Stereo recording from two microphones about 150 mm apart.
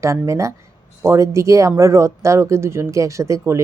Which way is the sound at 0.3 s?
20° right (ahead or behind).